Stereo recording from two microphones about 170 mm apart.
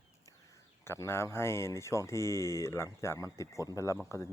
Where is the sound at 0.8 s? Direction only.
15° left (ahead or behind).